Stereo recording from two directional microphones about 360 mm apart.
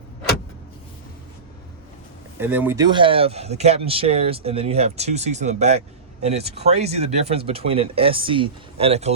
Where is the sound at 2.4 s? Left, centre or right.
Centre.